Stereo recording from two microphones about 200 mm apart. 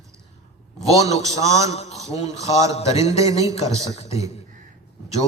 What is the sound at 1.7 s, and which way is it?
A man's voice, 35° left (ahead or behind).